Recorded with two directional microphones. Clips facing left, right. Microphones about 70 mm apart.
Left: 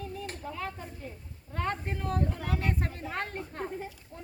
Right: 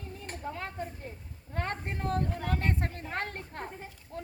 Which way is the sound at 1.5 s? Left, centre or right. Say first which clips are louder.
Left 2 dB; right.